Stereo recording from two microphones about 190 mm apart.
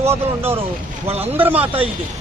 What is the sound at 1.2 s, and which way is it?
Speech, 10° right (ahead or behind).